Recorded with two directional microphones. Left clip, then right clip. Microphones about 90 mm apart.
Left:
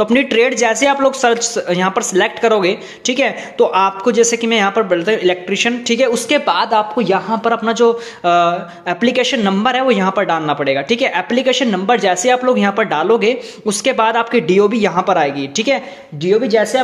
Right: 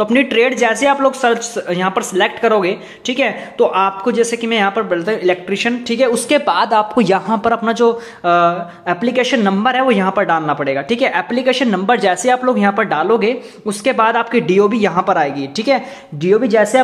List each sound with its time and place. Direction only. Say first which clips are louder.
0.0 s speech: even; 15° left (ahead or behind); by 7.9 s 5° right (ahead or behind)
8.2 s speech: right 1 dB; 15° left (ahead or behind)
16.2 s speech: right 1 dB; 25° right (ahead or behind)